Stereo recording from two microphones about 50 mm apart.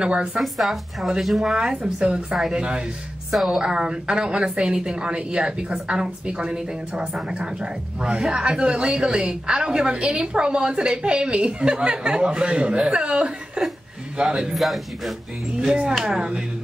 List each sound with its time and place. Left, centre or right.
0.0 s a woman's voice: right
0.4 s a woman's voice: centre
1.5 s a woman's voice: centre
2.1 s a woman's voice: centre
2.5 s a woman's voice: centre
3.3 s a woman's voice: centre
3.6 s a woman's voice: centre
14.5 s a woman's voice: centre
16.0 s a woman's voice: centre